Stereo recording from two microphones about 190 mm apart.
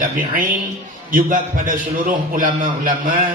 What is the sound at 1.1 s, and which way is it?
A man's voice, 45° right (ahead or behind).